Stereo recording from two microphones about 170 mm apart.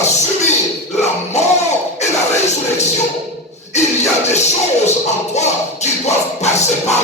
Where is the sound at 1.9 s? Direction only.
40° left (ahead or behind).